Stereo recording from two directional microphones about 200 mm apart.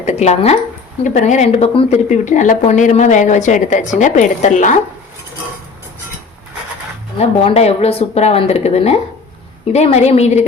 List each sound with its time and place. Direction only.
0.0 s speech: 35° left (ahead or behind)
7.2 s speech: 30° left (ahead or behind)